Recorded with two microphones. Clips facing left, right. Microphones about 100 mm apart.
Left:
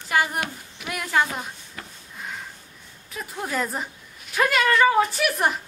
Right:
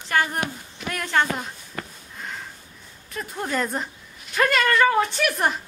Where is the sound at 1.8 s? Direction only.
55° right (ahead or behind).